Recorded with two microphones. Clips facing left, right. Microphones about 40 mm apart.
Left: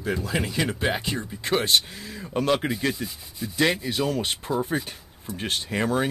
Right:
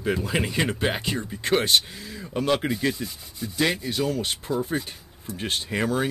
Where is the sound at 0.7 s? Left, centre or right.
Centre.